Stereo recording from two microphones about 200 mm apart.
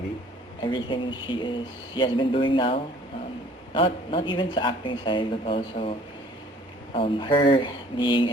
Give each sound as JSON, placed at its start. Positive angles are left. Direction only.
{"t": 0.6, "sound": "speech", "side_deg": 25}
{"t": 6.9, "sound": "speech", "side_deg": 25}